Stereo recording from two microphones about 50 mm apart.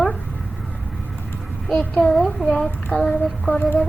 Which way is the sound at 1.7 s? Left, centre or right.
Left.